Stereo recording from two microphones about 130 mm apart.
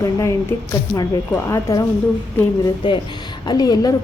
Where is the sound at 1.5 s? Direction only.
25° left (ahead or behind).